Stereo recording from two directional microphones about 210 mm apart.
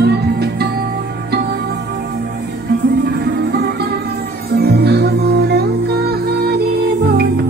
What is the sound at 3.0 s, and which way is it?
Music, 50° right (ahead or behind).